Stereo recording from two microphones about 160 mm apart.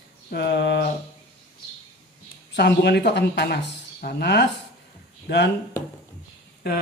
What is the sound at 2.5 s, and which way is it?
Speech, 90° left.